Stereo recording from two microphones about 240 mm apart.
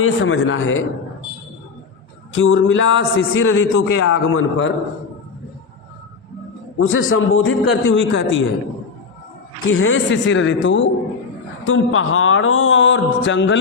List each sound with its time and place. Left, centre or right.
0.0 s speech: left
2.3 s a man's voice: left
6.7 s speech: left
9.7 s a man's voice: left